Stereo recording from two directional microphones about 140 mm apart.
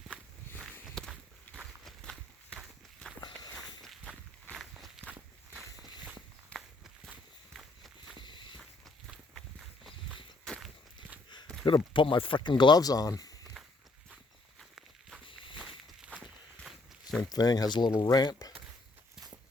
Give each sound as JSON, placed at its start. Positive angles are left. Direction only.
{"t": 0.7, "sound": "walk", "side_deg": 5}
{"t": 1.5, "sound": "run", "side_deg": 5}
{"t": 3.2, "sound": "walk", "side_deg": 30}
{"t": 3.6, "sound": "walk", "side_deg": 0}
{"t": 8.2, "sound": "a sound", "side_deg": 35}
{"t": 9.0, "sound": "walk", "side_deg": 0}
{"t": 11.6, "sound": "speech", "side_deg": 35}
{"t": 13.6, "sound": "walk", "side_deg": 0}
{"t": 15.2, "sound": "walk", "side_deg": 35}
{"t": 15.5, "sound": "walk", "side_deg": -5}
{"t": 17.2, "sound": "speech", "side_deg": 30}